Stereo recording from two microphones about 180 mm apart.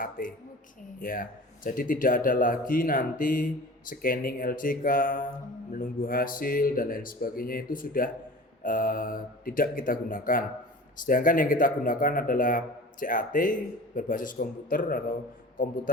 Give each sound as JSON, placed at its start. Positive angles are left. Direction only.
{"t": 0.2, "sound": "speech", "side_deg": 50}